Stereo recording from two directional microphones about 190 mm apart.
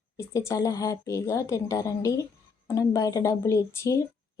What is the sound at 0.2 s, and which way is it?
Speech, 15° left (ahead or behind).